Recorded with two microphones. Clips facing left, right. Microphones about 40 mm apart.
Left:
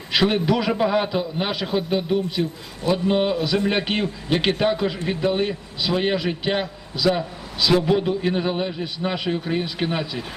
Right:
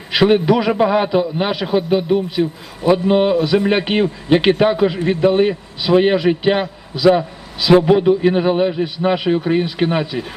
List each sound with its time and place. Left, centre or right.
0.1 s a man's voice: centre